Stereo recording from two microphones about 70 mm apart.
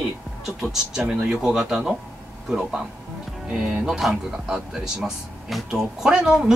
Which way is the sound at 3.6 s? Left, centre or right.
Centre.